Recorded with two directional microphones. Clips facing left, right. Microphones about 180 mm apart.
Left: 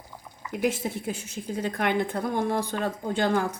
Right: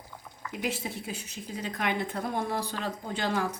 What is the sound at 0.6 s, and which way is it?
A woman's voice, 50° left (ahead or behind).